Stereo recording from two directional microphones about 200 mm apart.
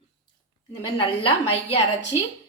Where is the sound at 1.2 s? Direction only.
30° left (ahead or behind).